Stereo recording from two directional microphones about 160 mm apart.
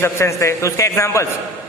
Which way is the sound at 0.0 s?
15° left (ahead or behind).